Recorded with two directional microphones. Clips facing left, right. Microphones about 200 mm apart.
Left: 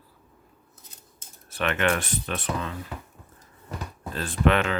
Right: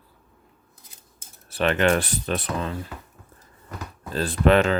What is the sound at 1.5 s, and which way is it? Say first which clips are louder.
Speech: right 5 dB; 35° right (ahead or behind).